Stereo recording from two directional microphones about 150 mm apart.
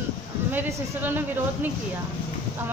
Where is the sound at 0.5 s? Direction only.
15° right (ahead or behind).